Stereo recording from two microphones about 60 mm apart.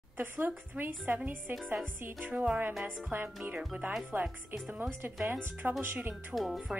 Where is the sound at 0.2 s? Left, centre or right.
Right.